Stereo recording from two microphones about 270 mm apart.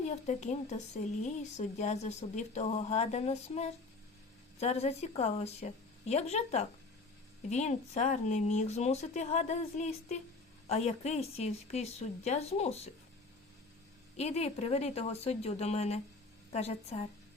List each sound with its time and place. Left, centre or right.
0.0 s speech: left
14.2 s speech: left